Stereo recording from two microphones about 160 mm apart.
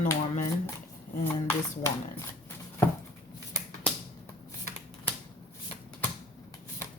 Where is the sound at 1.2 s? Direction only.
15° left (ahead or behind).